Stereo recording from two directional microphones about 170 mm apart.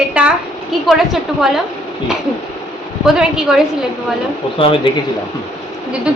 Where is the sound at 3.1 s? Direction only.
5° right (ahead or behind).